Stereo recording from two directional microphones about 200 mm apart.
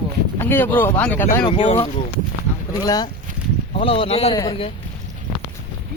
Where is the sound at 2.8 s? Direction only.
20° left (ahead or behind).